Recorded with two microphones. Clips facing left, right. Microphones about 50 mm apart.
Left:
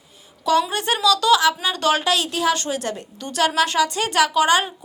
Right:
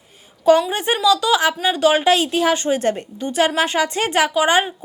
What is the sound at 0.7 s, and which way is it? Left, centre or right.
A woman's voice, right.